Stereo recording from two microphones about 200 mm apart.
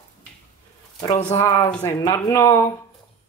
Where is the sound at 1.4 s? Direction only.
15° left (ahead or behind).